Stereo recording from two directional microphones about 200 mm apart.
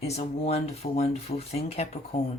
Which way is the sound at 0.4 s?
30° left (ahead or behind).